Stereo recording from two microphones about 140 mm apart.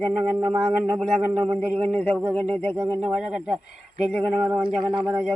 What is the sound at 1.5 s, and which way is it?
Speech, 10° left (ahead or behind).